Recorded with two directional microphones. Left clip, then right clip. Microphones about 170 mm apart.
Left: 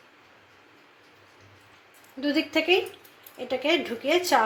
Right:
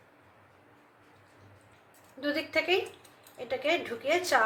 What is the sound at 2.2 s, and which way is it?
A woman's voice, 40° left (ahead or behind).